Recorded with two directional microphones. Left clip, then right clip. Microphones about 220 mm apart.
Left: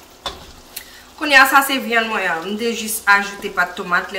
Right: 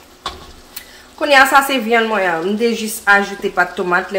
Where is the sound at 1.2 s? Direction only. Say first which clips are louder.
Right 1 dB; 30° right (ahead or behind).